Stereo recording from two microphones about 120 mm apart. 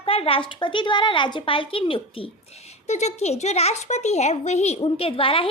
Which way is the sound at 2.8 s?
70° left (ahead or behind).